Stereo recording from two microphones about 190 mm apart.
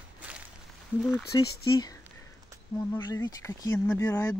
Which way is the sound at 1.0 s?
Centre (ahead or behind).